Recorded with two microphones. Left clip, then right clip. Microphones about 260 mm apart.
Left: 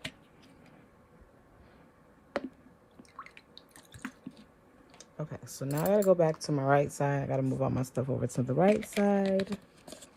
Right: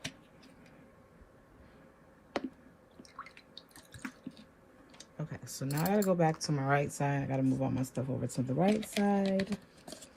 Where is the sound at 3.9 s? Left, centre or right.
Left.